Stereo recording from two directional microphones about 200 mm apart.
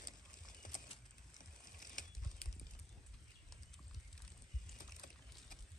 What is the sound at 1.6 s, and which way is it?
Boat, 40° left (ahead or behind).